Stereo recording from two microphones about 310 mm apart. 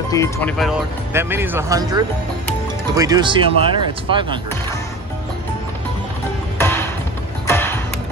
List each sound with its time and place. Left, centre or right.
0.1 s speech: centre
6.6 s music: centre
7.4 s a sound: centre